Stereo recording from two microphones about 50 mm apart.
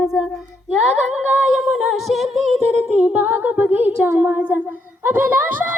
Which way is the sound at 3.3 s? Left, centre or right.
Right.